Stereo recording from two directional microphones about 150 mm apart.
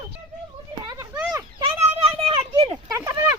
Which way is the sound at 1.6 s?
40° right (ahead or behind).